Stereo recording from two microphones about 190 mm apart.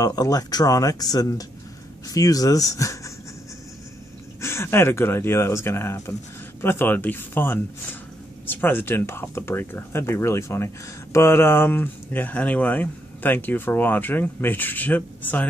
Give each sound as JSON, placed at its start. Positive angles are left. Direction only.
{"t": 0.0, "sound": "speech", "side_deg": 20}
{"t": 4.4, "sound": "speech", "side_deg": 15}